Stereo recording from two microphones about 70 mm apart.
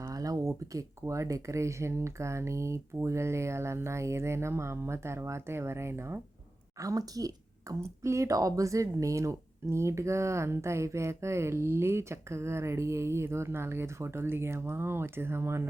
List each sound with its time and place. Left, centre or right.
0.0 s speech: right
6.7 s a woman's voice: right
7.8 s speech: right